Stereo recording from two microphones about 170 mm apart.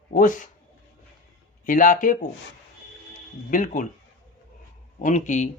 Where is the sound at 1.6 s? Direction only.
50° left (ahead or behind).